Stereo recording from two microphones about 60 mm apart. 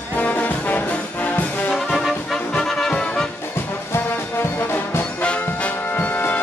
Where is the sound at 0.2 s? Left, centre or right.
Left.